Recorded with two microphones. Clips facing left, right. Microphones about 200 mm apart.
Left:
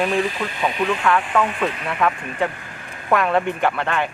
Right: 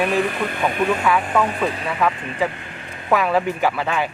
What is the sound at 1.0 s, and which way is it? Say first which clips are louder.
Speech: even; 5° right (ahead or behind).